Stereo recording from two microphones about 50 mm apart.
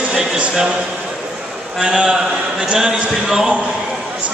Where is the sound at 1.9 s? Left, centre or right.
Centre.